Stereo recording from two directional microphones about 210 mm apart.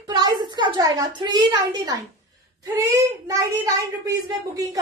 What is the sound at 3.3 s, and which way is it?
Speech, 15° right (ahead or behind).